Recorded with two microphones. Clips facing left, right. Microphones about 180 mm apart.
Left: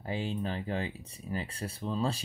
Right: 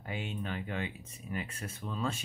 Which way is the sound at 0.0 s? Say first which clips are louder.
Left 5 dB; 30° left (ahead or behind).